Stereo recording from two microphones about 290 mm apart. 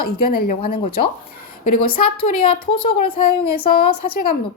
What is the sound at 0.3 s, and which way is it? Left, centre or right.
Speech, left.